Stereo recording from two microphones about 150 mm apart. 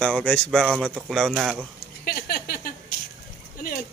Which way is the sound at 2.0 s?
90° left.